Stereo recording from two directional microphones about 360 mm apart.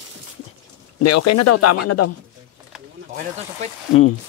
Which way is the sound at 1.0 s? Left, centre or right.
Left.